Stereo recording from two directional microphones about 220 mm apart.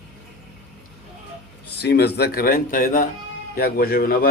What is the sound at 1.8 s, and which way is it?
A man's voice, 45° left (ahead or behind).